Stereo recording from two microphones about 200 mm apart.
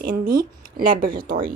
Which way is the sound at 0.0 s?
50° right (ahead or behind).